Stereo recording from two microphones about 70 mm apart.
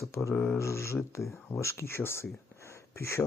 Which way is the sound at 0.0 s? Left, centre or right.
Left.